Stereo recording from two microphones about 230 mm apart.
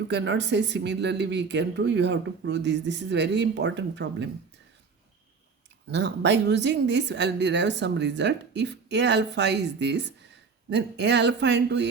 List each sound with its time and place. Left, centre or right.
0.1 s a woman's voice: right
5.9 s a woman's voice: right